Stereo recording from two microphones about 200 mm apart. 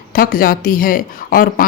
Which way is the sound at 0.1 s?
45° left (ahead or behind).